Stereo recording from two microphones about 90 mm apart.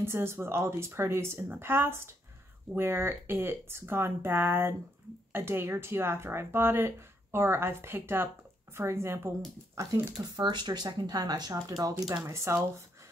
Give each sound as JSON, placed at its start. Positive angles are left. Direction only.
{"t": 0.0, "sound": "speech", "side_deg": -30}
{"t": 9.8, "sound": "speech", "side_deg": -45}
{"t": 10.3, "sound": "speech", "side_deg": -55}
{"t": 12.3, "sound": "speech", "side_deg": -30}